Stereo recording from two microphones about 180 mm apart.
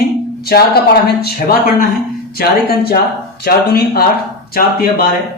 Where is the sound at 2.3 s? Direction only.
60° left (ahead or behind).